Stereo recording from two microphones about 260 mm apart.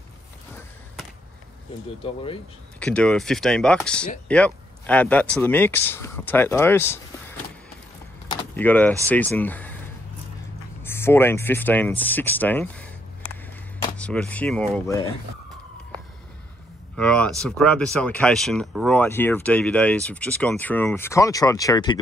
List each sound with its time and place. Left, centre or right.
2.0 s speech: left
2.8 s speech: centre
8.3 s keys jangling: centre
8.6 s speech: centre
10.8 s speech: centre
13.9 s speech: centre
16.9 s speech: centre